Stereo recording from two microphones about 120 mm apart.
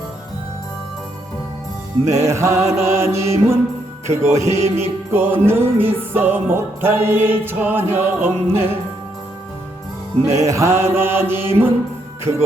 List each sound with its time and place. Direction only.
2.1 s music: 25° right (ahead or behind)
4.4 s music: 65° right (ahead or behind)
4.8 s music: 20° right (ahead or behind)
10.2 s music: 25° right (ahead or behind)